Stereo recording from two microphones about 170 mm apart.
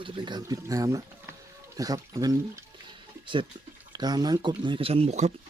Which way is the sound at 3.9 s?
25° right (ahead or behind).